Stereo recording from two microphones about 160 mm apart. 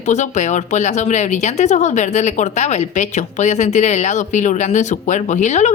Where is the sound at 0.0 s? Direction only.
45° left (ahead or behind).